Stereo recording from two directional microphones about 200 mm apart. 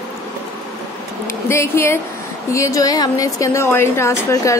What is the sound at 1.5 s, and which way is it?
A woman's voice, 10° left (ahead or behind).